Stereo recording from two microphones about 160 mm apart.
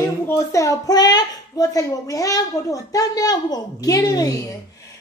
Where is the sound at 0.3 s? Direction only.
20° left (ahead or behind).